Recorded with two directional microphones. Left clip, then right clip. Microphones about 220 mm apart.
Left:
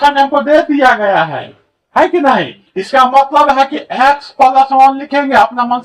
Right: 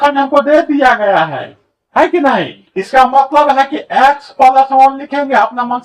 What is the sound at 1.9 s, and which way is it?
Speech, 10° left (ahead or behind).